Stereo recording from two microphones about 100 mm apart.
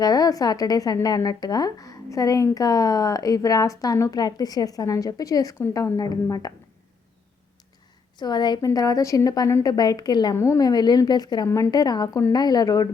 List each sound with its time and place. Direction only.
0.0 s a woman's voice: 40° left (ahead or behind)
8.2 s a woman's voice: 45° left (ahead or behind)
10.3 s a woman's voice: 25° left (ahead or behind)
10.6 s speech: 40° left (ahead or behind)
11.4 s a woman's voice: 25° left (ahead or behind)
11.7 s a woman's voice: 40° left (ahead or behind)